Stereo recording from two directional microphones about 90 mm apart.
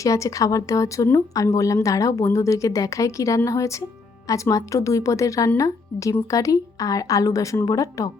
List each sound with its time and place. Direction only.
0.0 s a woman's voice: 35° left (ahead or behind)